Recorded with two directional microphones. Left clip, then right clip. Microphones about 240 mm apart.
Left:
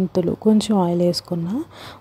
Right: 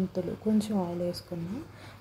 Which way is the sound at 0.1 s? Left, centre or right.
Left.